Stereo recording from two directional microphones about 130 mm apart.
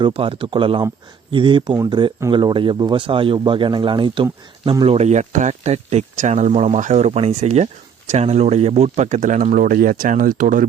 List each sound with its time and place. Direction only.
0.0 s speech: 40° right (ahead or behind)
4.9 s speech: 60° right (ahead or behind); by 10.7 s 90° right